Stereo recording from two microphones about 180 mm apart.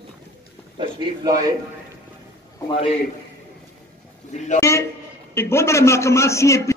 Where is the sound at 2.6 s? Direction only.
30° left (ahead or behind).